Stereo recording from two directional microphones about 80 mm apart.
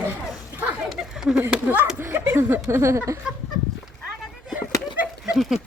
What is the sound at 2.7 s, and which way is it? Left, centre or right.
Speech, right.